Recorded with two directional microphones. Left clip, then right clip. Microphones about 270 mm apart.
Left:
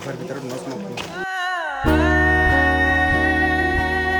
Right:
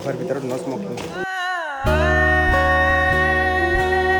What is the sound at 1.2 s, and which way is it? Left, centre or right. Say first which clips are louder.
Music: even; centre.